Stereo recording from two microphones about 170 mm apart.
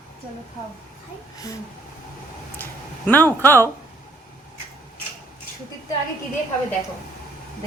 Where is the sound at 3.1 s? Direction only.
10° left (ahead or behind).